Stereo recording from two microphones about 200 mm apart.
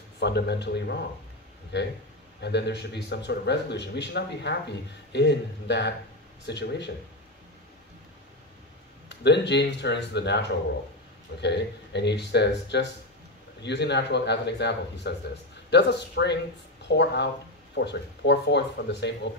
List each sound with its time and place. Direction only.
0.2 s a man's voice: 60° left (ahead or behind)
9.1 s a man's voice: 60° left (ahead or behind)